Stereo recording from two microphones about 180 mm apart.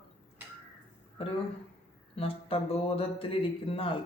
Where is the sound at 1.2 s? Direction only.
30° left (ahead or behind).